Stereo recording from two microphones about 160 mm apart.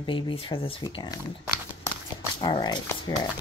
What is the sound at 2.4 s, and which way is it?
Speech, 25° left (ahead or behind).